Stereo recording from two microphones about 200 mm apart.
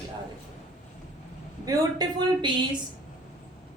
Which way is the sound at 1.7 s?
20° right (ahead or behind).